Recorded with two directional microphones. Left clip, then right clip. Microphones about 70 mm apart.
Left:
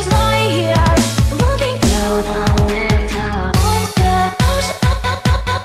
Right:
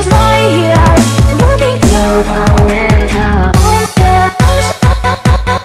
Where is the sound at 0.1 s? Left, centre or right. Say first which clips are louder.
Right 6 dB; left.